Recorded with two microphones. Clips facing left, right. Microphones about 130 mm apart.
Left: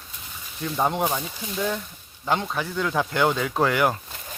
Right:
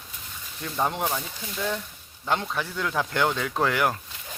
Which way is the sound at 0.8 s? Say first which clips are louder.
Left 3 dB; 5° left (ahead or behind).